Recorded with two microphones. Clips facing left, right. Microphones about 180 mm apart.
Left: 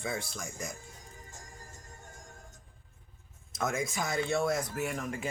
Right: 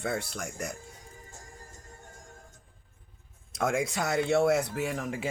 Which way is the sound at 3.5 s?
70° right (ahead or behind).